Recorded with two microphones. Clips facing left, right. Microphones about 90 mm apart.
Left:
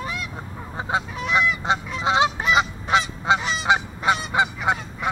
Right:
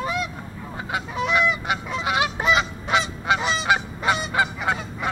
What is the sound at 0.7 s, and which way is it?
Goose, 25° left (ahead or behind).